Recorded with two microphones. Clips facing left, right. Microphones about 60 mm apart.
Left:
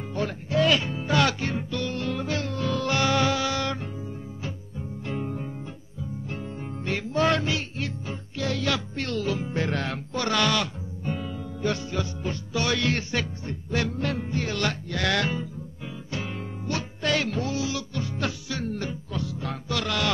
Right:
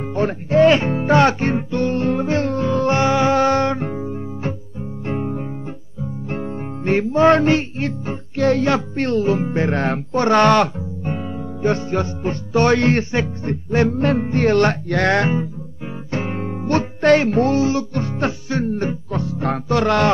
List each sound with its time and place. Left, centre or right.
0.1 s music: right
3.3 s music: right
11.1 s music: right